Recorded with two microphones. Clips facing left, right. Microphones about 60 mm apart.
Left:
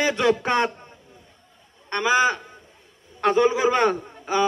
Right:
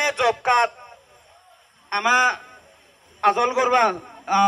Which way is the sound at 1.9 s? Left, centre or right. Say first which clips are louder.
Right 1 dB; right.